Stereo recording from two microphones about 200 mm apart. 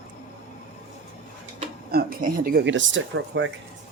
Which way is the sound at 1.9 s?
45° right (ahead or behind).